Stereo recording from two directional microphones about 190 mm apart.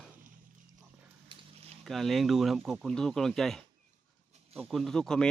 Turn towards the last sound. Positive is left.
turn(degrees=5)  # may be behind; listen again after turning